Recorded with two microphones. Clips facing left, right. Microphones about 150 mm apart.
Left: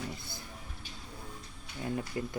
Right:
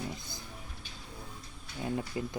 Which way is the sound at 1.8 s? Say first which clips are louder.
Right 1 dB; 15° right (ahead or behind).